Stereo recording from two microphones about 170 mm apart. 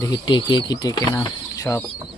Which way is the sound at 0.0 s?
25° left (ahead or behind).